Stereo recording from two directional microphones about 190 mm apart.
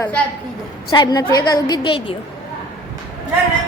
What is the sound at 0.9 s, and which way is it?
A woman's voice, 20° left (ahead or behind).